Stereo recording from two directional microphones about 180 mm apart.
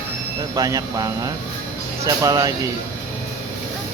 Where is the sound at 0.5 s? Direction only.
20° right (ahead or behind).